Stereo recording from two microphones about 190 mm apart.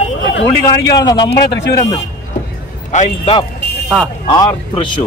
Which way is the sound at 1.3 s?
60° left (ahead or behind).